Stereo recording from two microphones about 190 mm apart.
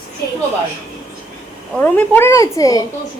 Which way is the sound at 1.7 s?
10° left (ahead or behind).